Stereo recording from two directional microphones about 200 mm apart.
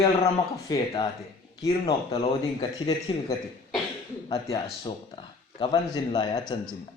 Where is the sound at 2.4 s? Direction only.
20° left (ahead or behind).